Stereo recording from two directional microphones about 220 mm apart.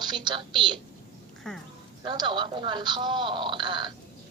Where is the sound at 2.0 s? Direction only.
20° right (ahead or behind).